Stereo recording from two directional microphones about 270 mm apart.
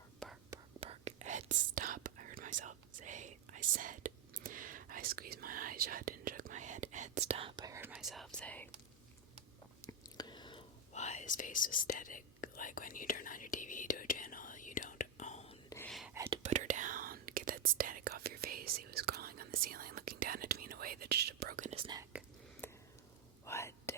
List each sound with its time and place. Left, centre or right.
0.2 s whispering: centre
0.8 s whispering: right; by 8.7 s centre
9.8 s whispering: centre
15.7 s whispering: centre
16.1 s whispering: centre
16.4 s whispering: right
22.1 s whispering: centre
22.6 s a sound: centre
23.5 s whispering: centre